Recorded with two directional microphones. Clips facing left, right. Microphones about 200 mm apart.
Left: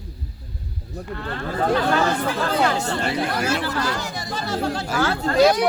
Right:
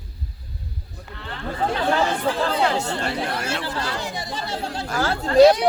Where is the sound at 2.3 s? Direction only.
30° right (ahead or behind).